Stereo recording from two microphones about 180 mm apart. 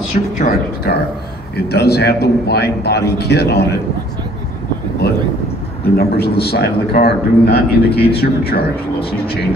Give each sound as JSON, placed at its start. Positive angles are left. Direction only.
{"t": 0.4, "sound": "a sound", "side_deg": 55}
{"t": 1.7, "sound": "a man's voice", "side_deg": 65}
{"t": 5.0, "sound": "a man's voice", "side_deg": 65}